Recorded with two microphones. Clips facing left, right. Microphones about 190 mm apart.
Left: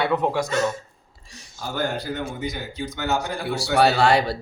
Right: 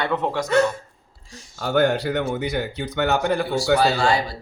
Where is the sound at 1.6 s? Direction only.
70° right (ahead or behind).